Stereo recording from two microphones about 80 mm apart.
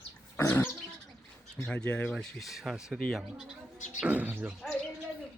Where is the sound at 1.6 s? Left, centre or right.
Centre.